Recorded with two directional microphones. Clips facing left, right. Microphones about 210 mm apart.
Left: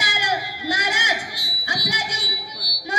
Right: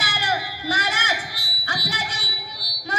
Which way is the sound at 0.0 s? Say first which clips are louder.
Left 1 dB; 15° left (ahead or behind).